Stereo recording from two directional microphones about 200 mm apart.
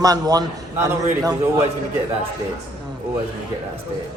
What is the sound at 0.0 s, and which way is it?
A man's voice, 20° right (ahead or behind).